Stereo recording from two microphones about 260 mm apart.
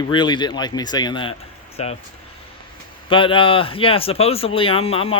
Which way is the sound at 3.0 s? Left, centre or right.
Centre.